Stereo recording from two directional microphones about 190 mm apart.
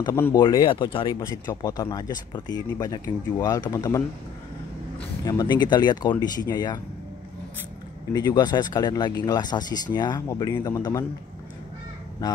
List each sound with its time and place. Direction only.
0.0 s speech: 15° left (ahead or behind)
5.2 s speech: 20° left (ahead or behind)
8.1 s speech: 20° left (ahead or behind)